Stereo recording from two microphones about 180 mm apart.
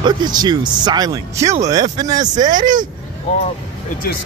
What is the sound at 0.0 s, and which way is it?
Speech, 25° right (ahead or behind).